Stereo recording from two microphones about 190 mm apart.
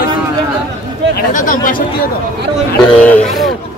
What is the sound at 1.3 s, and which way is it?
Speech, 45° left (ahead or behind).